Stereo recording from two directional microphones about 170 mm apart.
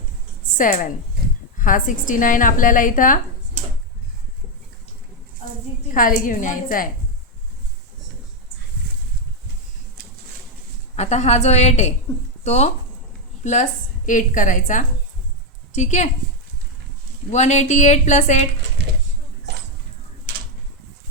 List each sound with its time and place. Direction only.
0.5 s a woman's voice: 50° left (ahead or behind)
5.9 s a woman's voice: 50° left (ahead or behind)
10.9 s a woman's voice: 40° left (ahead or behind)
17.3 s a woman's voice: 45° left (ahead or behind)